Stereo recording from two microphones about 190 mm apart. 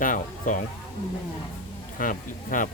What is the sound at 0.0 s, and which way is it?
Speech, 45° left (ahead or behind).